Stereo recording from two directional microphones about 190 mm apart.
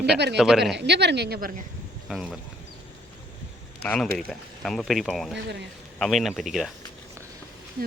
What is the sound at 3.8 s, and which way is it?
Speech, 5° left (ahead or behind).